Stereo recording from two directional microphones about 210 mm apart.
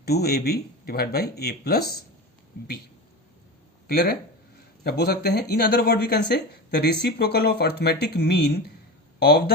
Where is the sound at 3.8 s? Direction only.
45° left (ahead or behind).